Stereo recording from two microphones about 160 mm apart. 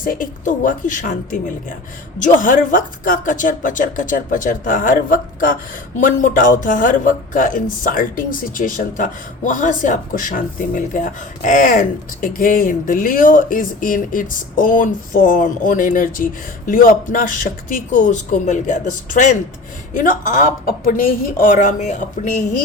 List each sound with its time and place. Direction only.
0.0 s speech: 60° left (ahead or behind)